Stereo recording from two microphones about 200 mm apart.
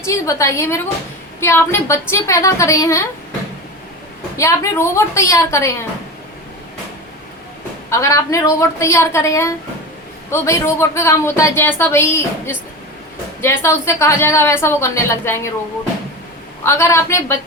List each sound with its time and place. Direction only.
0.0 s speech: 15° left (ahead or behind)
4.4 s speech: 15° left (ahead or behind)
7.9 s speech: 15° left (ahead or behind)
16.6 s speech: 15° left (ahead or behind)